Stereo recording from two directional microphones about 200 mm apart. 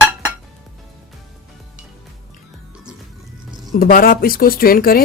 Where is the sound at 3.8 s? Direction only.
45° left (ahead or behind).